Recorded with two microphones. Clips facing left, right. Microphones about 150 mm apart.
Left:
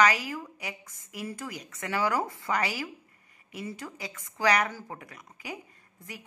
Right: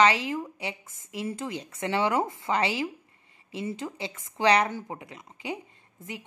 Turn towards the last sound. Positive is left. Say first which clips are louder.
# right 5 dB
turn(degrees=-25)  # may be behind; listen again after turning